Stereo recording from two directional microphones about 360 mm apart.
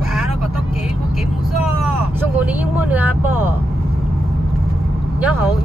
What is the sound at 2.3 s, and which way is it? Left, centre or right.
Vehicle, centre.